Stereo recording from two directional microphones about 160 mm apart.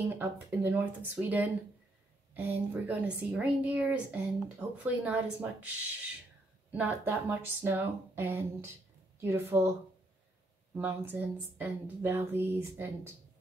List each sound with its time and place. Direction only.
0.2 s a woman's voice: 15° right (ahead or behind)
6.7 s a woman's voice: 10° right (ahead or behind)